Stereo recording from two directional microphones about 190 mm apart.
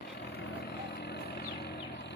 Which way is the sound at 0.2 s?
60° left (ahead or behind).